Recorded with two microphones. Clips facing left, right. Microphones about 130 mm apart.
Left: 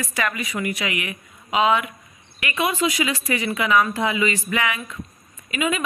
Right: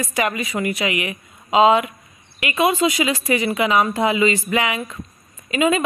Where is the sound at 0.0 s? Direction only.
25° right (ahead or behind).